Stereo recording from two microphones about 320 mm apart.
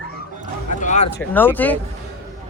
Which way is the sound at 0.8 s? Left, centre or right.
Left.